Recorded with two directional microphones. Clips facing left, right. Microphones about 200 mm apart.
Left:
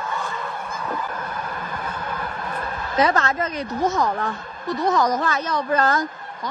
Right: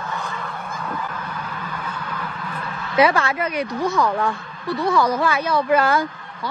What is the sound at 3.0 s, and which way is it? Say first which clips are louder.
Speech: right 2 dB; 10° right (ahead or behind).